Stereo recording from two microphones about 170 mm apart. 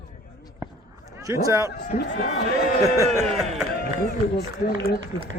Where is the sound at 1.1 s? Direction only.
20° right (ahead or behind).